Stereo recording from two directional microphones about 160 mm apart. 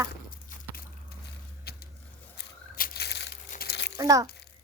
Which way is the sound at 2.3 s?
75° left (ahead or behind).